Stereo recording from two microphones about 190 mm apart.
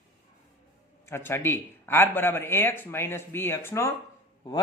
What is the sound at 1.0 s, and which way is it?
Speech, 10° left (ahead or behind).